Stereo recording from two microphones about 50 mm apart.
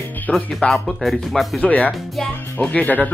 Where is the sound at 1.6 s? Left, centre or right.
Left.